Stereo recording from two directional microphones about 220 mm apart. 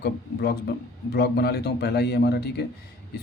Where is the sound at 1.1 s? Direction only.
45° left (ahead or behind).